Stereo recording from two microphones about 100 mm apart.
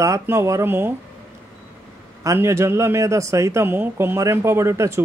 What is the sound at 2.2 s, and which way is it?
Speech, 30° right (ahead or behind).